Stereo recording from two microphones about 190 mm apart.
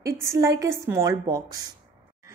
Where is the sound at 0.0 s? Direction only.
15° right (ahead or behind).